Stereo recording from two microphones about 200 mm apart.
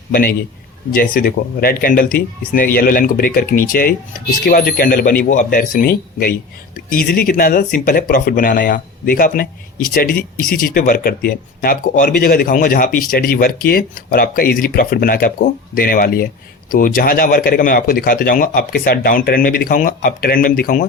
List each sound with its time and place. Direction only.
0.9 s a man's voice: 45° left (ahead or behind)